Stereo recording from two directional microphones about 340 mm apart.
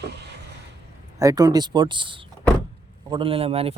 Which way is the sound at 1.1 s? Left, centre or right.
Centre.